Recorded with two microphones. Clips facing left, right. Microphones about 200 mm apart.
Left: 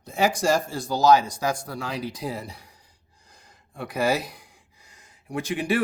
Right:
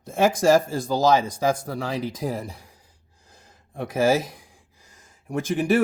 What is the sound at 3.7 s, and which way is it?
Speech, 45° right (ahead or behind).